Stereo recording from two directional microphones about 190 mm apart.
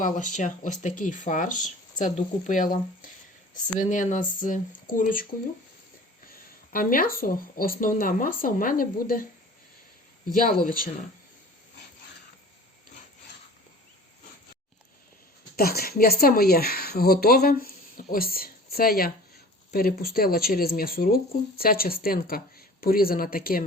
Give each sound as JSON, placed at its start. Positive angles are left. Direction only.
{"t": 0.0, "sound": "speech", "side_deg": 40}
{"t": 6.7, "sound": "speech", "side_deg": 50}
{"t": 10.2, "sound": "speech", "side_deg": 45}
{"t": 15.5, "sound": "a woman's voice", "side_deg": 55}